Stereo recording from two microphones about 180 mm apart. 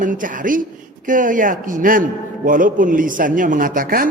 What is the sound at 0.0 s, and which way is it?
A man's voice, 50° right (ahead or behind).